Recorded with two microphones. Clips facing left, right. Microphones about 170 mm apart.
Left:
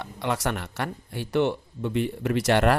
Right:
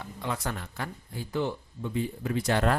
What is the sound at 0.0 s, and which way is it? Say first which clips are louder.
Speech: left 6 dB; 75° left (ahead or behind).